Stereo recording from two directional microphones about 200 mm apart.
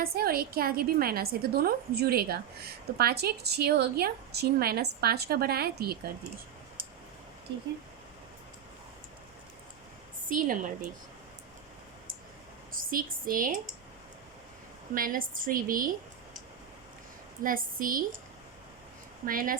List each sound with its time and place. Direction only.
0.0 s a woman's voice: 50° right (ahead or behind)
7.5 s speech: 60° right (ahead or behind)
10.2 s a woman's voice: 40° right (ahead or behind)
12.7 s speech: 45° right (ahead or behind)
14.9 s a woman's voice: 45° right (ahead or behind)
17.4 s a woman's voice: 45° right (ahead or behind)
19.2 s a woman's voice: 45° right (ahead or behind)